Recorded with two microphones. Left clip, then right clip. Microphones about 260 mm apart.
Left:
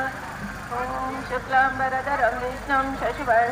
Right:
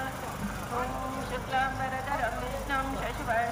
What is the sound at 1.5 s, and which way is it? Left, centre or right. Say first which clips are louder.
Speech: left 10 dB; centre.